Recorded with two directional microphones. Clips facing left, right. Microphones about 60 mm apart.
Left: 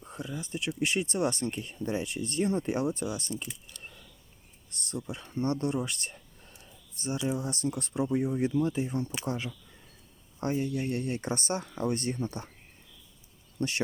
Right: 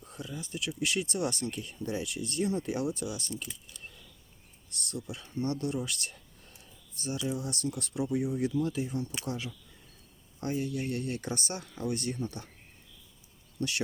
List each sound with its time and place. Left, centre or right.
0.0 s speech: left
4.7 s speech: left
13.6 s speech: left